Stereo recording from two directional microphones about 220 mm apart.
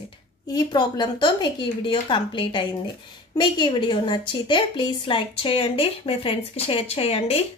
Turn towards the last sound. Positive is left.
turn(degrees=25)  # may be behind; listen again after turning